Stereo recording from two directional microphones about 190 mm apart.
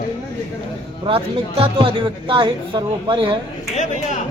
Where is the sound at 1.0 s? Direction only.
30° right (ahead or behind).